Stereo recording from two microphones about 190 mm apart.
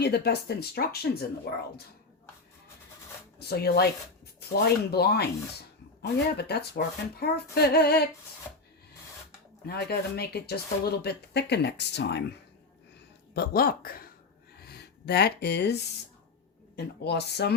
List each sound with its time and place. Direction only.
0.0 s speech: 60° left (ahead or behind)
3.3 s speech: 55° left (ahead or behind)
4.9 s speech: 55° left (ahead or behind)
9.6 s speech: 55° left (ahead or behind)
13.3 s speech: 55° left (ahead or behind)
14.6 s a sound: 55° left (ahead or behind)
16.7 s speech: 60° left (ahead or behind)